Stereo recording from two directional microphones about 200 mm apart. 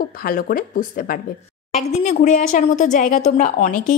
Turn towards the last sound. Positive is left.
turn(degrees=40)  # may be behind; listen again after turning